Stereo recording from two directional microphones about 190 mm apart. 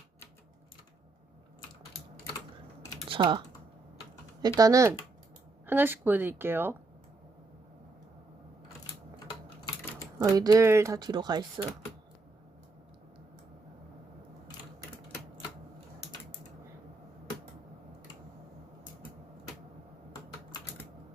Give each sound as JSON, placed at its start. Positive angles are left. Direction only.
{"t": 3.1, "sound": "speech", "side_deg": -25}
{"t": 4.4, "sound": "speech", "side_deg": -20}
{"t": 10.2, "sound": "speech", "side_deg": -20}